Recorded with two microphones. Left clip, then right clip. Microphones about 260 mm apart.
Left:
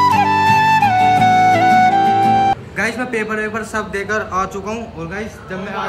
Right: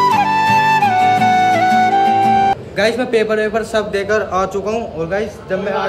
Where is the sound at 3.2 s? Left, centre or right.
Centre.